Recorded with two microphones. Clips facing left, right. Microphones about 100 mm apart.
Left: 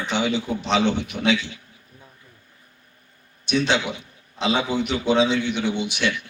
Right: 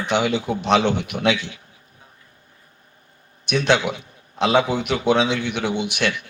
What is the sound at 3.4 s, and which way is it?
A man's voice, 55° right (ahead or behind).